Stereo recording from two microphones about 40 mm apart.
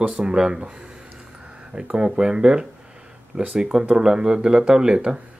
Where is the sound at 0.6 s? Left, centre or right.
Right.